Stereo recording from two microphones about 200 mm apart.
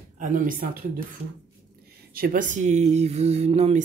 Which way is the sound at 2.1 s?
45° right (ahead or behind).